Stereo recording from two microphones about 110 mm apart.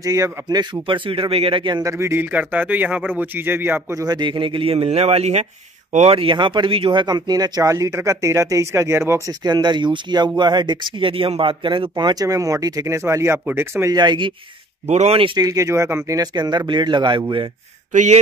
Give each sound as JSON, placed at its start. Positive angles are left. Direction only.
{"t": 0.0, "sound": "speech", "side_deg": -30}
{"t": 1.8, "sound": "speech", "side_deg": -25}
{"t": 4.0, "sound": "a man's voice", "side_deg": -40}
{"t": 6.1, "sound": "speech", "side_deg": -50}
{"t": 9.4, "sound": "speech", "side_deg": -40}
{"t": 11.9, "sound": "speech", "side_deg": -40}
{"t": 13.9, "sound": "speech", "side_deg": -45}
{"t": 14.9, "sound": "a man's voice", "side_deg": -70}
{"t": 15.3, "sound": "speech", "side_deg": -30}
{"t": 16.2, "sound": "speech", "side_deg": -40}